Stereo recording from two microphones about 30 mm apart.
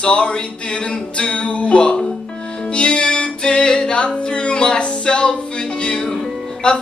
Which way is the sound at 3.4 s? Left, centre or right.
Left.